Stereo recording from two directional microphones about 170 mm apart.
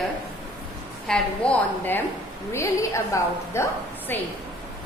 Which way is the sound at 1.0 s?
5° left (ahead or behind).